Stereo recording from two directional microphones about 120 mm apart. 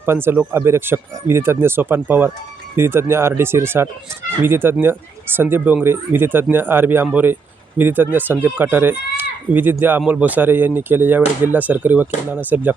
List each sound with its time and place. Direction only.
0.0 s speech: 20° right (ahead or behind)